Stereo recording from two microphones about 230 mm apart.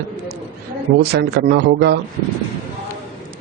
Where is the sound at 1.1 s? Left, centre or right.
Right.